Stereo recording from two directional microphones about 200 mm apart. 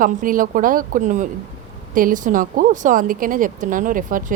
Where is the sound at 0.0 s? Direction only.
45° right (ahead or behind).